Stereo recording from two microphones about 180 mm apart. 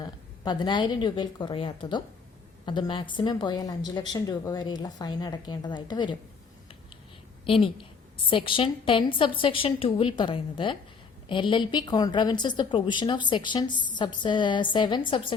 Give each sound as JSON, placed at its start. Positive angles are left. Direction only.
{"t": 0.0, "sound": "a woman's voice", "side_deg": 25}
{"t": 7.4, "sound": "a woman's voice", "side_deg": 30}